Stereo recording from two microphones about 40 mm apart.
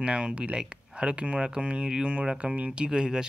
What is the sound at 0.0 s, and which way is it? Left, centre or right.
Speech, right.